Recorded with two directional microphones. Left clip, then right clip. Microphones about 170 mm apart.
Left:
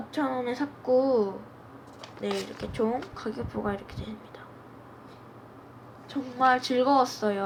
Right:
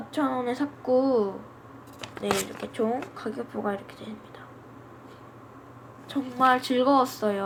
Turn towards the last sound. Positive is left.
turn(degrees=-5)  # may be behind; listen again after turning